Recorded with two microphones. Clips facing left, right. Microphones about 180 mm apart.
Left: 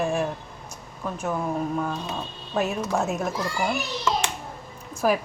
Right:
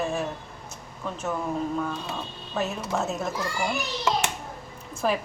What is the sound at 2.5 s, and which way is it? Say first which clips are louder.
Speech: left 3 dB; 15° left (ahead or behind).